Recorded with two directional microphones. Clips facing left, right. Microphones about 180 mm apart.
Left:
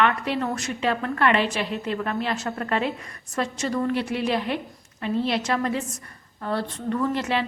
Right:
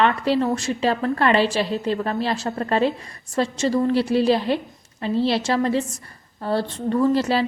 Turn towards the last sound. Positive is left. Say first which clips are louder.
# right 6 dB
turn(degrees=-35)  # may be behind; listen again after turning